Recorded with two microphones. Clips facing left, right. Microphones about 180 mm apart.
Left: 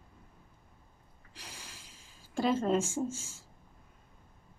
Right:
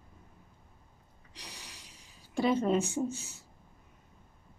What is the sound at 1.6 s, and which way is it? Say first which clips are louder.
Snort: even; 75° right (ahead or behind).